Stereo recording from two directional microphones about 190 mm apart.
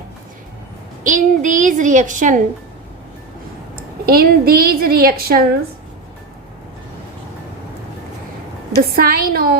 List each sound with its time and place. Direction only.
1.0 s a woman's voice: 40° right (ahead or behind)
4.0 s a woman's voice: 55° right (ahead or behind)
9.0 s a woman's voice: 55° right (ahead or behind)